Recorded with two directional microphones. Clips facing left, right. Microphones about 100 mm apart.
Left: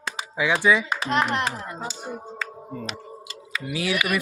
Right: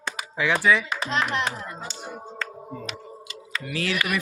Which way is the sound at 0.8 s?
50° left (ahead or behind).